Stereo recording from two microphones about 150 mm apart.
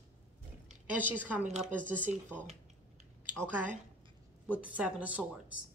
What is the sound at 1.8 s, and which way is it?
Speech, 60° right (ahead or behind).